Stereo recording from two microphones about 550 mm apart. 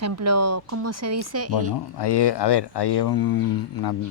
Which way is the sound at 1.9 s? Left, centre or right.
Left.